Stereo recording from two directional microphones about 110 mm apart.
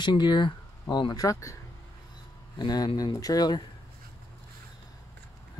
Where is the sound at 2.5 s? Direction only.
40° left (ahead or behind).